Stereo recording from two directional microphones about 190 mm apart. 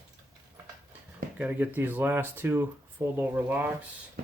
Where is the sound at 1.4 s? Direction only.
10° right (ahead or behind).